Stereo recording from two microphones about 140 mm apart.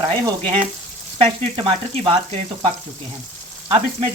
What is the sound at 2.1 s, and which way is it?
Sizzle, 40° right (ahead or behind).